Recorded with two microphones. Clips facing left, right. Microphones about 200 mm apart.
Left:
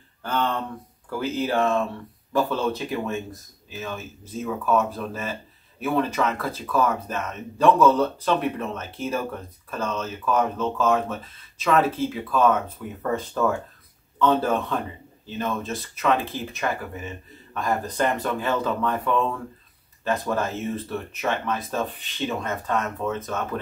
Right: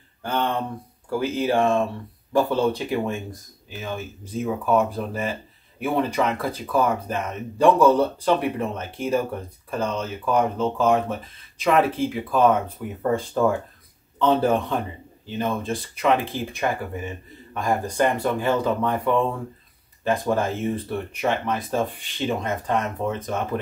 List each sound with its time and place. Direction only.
0.2 s speech: 15° right (ahead or behind)